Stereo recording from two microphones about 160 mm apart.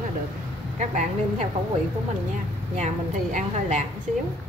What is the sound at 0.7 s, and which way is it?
Speech, 45° right (ahead or behind).